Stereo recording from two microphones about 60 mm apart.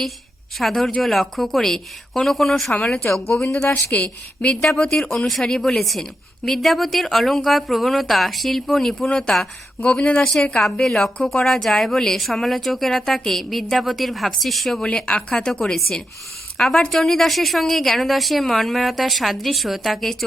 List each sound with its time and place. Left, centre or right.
0.6 s a woman's voice: centre
3.3 s speech: left
3.9 s a woman's voice: left; by 14.8 s centre
14.9 s speech: centre
15.6 s a woman's voice: centre